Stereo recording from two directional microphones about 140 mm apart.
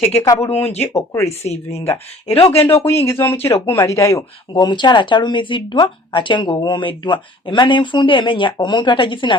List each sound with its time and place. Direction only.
0.5 s speech: 45° left (ahead or behind)
0.8 s speech: 20° left (ahead or behind)
2.2 s speech: 45° left (ahead or behind)
2.6 s speech: 15° left (ahead or behind); by 9.3 s 35° left (ahead or behind)